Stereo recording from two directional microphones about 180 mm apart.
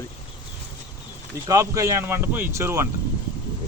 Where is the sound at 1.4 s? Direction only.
20° right (ahead or behind).